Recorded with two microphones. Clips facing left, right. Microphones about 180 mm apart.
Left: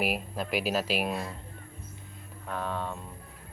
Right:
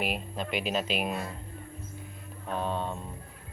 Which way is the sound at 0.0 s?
5° left (ahead or behind).